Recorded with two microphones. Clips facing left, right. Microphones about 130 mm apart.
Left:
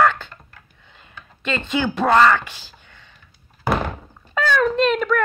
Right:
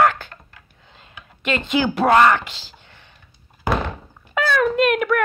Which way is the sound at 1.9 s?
15° right (ahead or behind).